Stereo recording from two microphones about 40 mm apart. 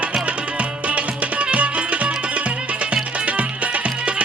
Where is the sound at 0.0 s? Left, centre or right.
Right.